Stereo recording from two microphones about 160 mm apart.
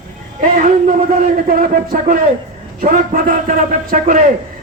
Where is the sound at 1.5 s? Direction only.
55° right (ahead or behind).